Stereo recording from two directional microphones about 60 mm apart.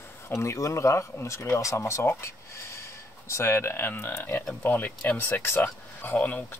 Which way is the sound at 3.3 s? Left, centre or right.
Left.